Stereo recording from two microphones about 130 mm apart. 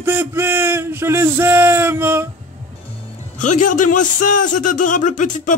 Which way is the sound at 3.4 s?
80° left.